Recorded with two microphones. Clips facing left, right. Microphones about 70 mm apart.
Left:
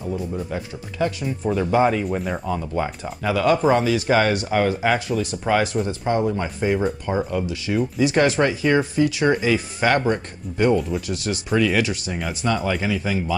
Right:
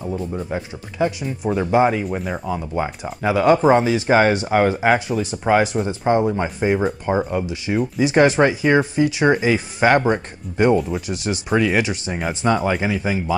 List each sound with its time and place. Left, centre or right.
0.3 s speech: centre
2.0 s speech: centre; by 13.2 s right